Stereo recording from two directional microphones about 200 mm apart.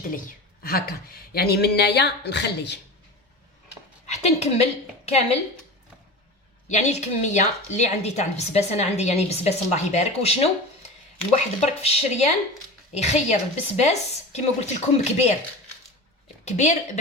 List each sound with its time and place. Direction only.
0.0 s a woman's voice: 45° left (ahead or behind)
4.0 s a woman's voice: 35° left (ahead or behind)
6.7 s a woman's voice: 35° left (ahead or behind)
15.0 s a woman's voice: 35° left (ahead or behind)
16.5 s a woman's voice: 35° left (ahead or behind)